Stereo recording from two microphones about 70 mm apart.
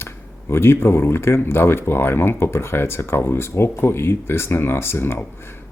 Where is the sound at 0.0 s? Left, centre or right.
Left.